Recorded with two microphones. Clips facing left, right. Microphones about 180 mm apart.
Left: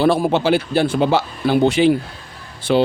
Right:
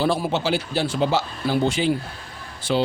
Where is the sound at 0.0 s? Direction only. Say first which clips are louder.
Left 6 dB; 60° left (ahead or behind).